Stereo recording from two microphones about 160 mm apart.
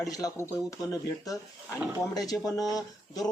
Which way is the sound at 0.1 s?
25° left (ahead or behind).